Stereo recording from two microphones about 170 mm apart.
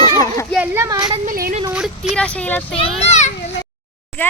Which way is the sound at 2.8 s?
35° left (ahead or behind).